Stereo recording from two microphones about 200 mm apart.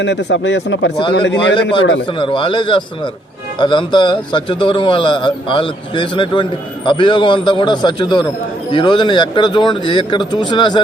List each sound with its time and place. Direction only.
0.0 s speech: 60° left (ahead or behind)
2.0 s a man's voice: 25° left (ahead or behind)